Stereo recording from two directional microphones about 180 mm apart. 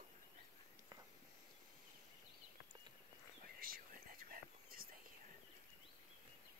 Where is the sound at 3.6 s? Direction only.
50° right (ahead or behind).